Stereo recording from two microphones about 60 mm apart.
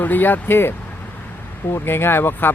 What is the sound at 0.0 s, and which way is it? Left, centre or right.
Speech, left.